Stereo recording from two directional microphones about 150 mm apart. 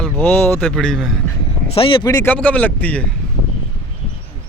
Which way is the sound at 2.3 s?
10° left (ahead or behind).